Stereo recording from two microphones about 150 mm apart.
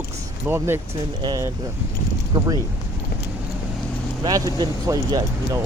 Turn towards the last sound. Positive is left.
turn(degrees=-25)  # may be behind; listen again after turning